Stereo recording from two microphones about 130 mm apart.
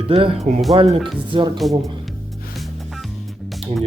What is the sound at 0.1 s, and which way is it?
Speech, 45° right (ahead or behind).